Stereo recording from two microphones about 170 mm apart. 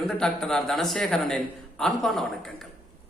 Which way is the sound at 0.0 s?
Centre (ahead or behind).